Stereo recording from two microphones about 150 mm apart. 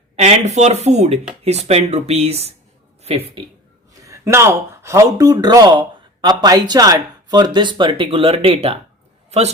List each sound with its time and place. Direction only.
0.2 s speech: 50° right (ahead or behind)
4.0 s speech: 20° right (ahead or behind); by 8.8 s 40° right (ahead or behind)